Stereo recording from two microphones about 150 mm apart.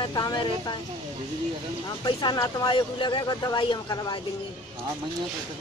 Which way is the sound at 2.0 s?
30° left (ahead or behind).